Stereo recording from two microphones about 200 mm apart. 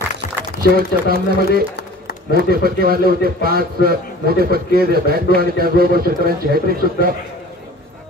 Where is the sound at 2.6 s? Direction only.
50° right (ahead or behind).